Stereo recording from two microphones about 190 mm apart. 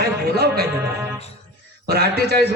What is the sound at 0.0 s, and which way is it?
Music, 55° right (ahead or behind).